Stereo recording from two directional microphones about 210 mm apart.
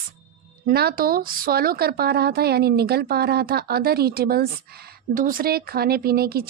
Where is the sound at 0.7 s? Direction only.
45° right (ahead or behind).